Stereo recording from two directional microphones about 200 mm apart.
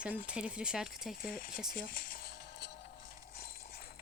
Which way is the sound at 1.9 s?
45° left (ahead or behind).